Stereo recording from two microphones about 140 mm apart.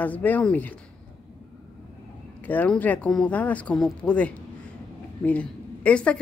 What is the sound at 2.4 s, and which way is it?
Speech, 10° left (ahead or behind).